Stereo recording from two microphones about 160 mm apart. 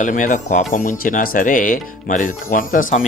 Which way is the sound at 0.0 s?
55° left (ahead or behind).